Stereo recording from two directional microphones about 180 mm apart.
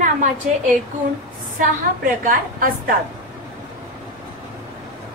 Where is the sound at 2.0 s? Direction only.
50° right (ahead or behind).